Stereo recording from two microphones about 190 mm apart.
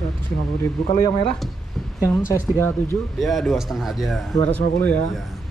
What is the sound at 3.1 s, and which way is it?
Speech, centre (ahead or behind).